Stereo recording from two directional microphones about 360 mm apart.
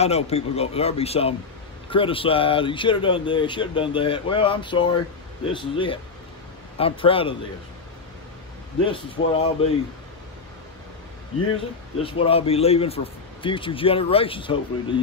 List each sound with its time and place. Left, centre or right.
0.0 s speech: centre
8.8 s speech: centre
12.0 s speech: centre